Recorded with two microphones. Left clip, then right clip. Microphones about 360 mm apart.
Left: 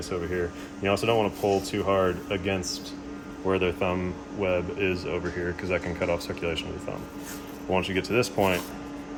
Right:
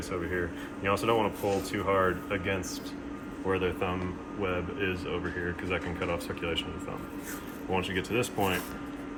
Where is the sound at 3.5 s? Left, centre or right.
Left.